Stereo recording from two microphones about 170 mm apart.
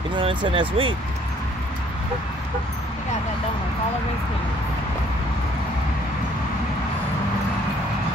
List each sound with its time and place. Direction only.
0.1 s speech: 30° right (ahead or behind)